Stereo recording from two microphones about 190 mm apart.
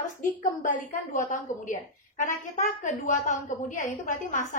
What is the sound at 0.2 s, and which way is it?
A woman's voice, 45° left (ahead or behind).